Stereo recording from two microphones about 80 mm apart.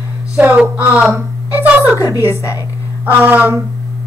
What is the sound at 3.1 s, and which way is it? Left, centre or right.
Speech, right.